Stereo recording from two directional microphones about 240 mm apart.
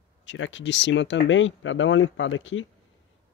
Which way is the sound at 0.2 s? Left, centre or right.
Left.